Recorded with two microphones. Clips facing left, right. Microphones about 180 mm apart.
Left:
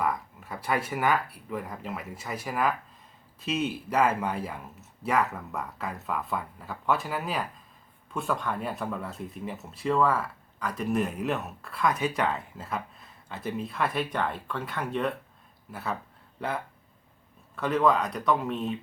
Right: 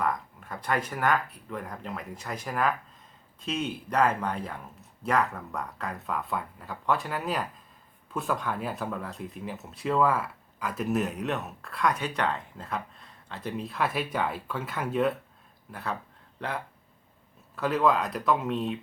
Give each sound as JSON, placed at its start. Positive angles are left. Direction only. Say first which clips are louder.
{"t": 0.0, "sound": "speech", "louder": "even", "side_deg": 5}